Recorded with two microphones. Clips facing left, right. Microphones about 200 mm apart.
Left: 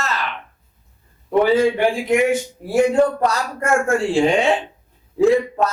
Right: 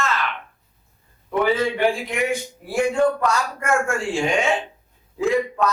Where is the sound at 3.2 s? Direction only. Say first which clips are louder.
Left 2 dB; 35° left (ahead or behind).